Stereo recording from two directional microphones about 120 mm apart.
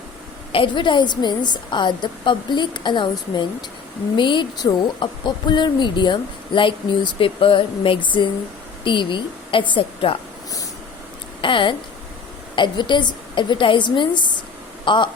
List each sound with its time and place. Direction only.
0.5 s a woman's voice: 45° left (ahead or behind)
11.3 s speech: 45° left (ahead or behind)